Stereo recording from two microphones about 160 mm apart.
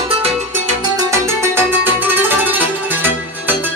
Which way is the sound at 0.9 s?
20° right (ahead or behind).